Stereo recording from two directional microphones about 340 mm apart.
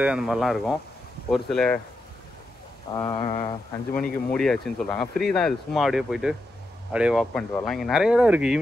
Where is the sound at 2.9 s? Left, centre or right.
Centre.